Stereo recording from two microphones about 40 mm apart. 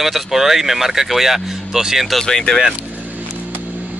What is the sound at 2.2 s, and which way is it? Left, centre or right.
Speech, centre.